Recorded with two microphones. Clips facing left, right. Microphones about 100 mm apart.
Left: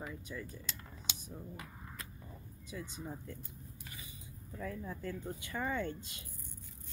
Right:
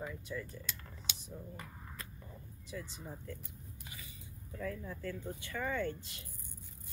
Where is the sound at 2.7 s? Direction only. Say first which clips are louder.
Left 1 dB; 15° left (ahead or behind).